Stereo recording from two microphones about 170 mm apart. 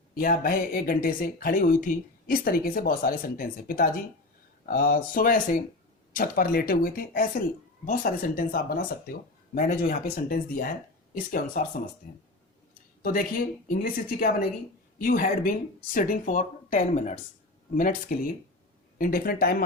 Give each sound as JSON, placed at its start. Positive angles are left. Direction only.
{"t": 0.1, "sound": "speech", "side_deg": 60}